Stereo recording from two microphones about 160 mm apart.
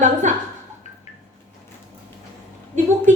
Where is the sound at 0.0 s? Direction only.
50° right (ahead or behind).